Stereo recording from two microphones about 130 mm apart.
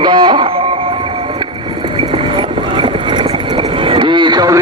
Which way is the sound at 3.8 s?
40° right (ahead or behind).